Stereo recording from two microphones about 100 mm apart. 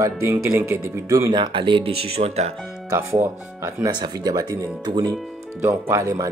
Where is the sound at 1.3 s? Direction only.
55° right (ahead or behind); by 2.6 s 90° right.